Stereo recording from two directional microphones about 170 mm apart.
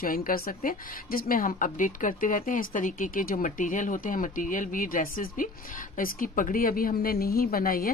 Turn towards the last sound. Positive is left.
turn(degrees=60)  # may be behind; listen again after turning